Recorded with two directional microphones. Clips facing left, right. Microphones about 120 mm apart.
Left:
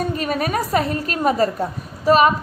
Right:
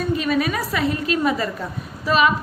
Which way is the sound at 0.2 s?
45° left (ahead or behind).